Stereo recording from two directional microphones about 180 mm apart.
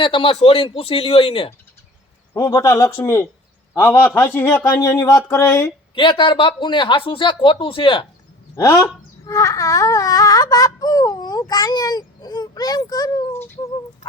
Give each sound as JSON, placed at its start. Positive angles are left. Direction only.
{"t": 0.0, "sound": "speech", "side_deg": 30}
{"t": 2.3, "sound": "a man's voice", "side_deg": 20}
{"t": 5.9, "sound": "speech", "side_deg": 25}
{"t": 8.5, "sound": "speech", "side_deg": 20}